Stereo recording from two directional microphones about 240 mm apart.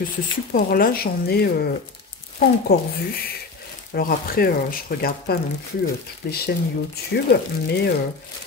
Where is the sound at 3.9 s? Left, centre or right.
Left.